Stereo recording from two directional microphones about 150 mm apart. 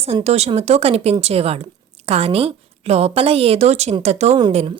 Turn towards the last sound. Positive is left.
turn(degrees=-45)  # may be behind; listen again after turning